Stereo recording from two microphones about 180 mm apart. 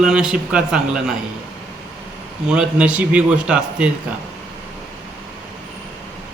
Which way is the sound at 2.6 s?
5° right (ahead or behind).